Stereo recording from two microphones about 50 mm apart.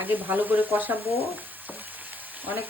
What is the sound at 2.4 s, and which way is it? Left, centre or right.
Frying, right.